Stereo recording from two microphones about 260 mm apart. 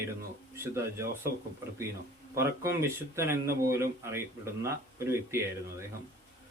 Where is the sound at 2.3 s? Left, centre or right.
Centre.